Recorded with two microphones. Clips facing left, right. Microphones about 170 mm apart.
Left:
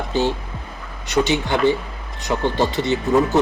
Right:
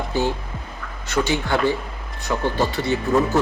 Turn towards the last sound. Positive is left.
turn(degrees=20)  # may be behind; listen again after turning